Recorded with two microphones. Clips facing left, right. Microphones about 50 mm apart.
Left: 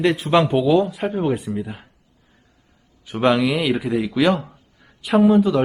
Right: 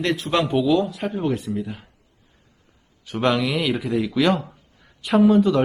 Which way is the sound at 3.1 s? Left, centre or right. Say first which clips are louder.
Left 3 dB; centre.